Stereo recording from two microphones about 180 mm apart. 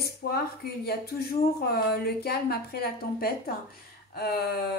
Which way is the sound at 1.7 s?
60° left (ahead or behind).